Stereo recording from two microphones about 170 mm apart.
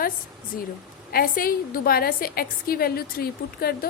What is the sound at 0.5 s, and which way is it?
A woman's voice, 55° left (ahead or behind).